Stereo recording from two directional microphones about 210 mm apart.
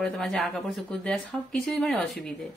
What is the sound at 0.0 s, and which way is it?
Speech, 5° left (ahead or behind).